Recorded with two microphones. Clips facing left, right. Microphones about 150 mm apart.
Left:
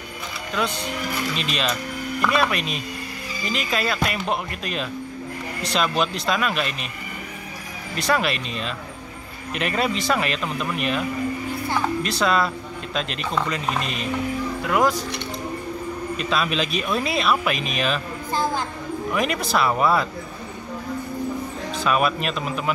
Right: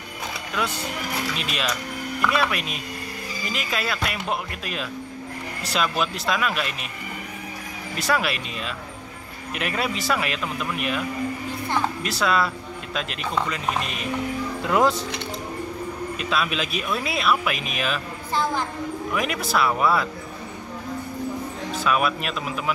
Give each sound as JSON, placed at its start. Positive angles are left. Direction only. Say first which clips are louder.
{"t": 0.6, "sound": "speech", "louder": "left 2 dB", "side_deg": -10}
{"t": 7.9, "sound": "speech", "louder": "left 2 dB", "side_deg": -5}
{"t": 12.0, "sound": "speech", "louder": "left 2 dB", "side_deg": -5}
{"t": 14.6, "sound": "speech", "louder": "right 1 dB", "side_deg": -25}
{"t": 16.2, "sound": "speech", "louder": "left 2 dB", "side_deg": -5}
{"t": 19.1, "sound": "speech", "louder": "left 2 dB", "side_deg": -5}
{"t": 21.7, "sound": "speech", "louder": "left 2 dB", "side_deg": 0}